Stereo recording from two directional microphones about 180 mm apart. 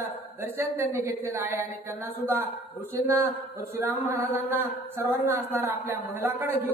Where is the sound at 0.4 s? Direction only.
15° right (ahead or behind).